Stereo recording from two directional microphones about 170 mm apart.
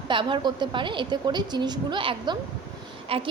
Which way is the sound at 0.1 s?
30° right (ahead or behind).